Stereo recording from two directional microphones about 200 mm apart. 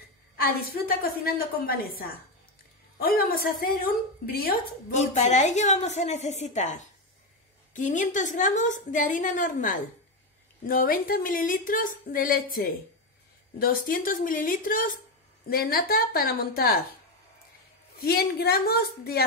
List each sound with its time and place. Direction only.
0.4 s a woman's voice: 50° left (ahead or behind)
18.0 s a woman's voice: 50° left (ahead or behind)